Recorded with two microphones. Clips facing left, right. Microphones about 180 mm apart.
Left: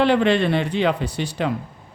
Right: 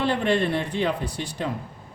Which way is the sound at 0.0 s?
80° left.